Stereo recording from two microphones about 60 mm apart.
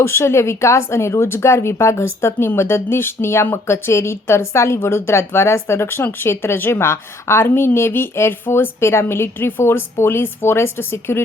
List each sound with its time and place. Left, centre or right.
0.0 s a woman's voice: left